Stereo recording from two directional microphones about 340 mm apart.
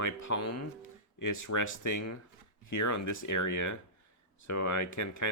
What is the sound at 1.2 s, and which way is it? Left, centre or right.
Speech, left.